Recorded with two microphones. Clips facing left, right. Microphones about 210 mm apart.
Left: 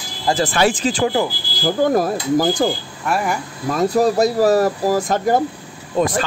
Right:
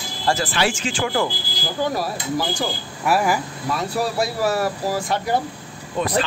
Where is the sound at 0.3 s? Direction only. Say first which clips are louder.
Left 4 dB; 40° left (ahead or behind).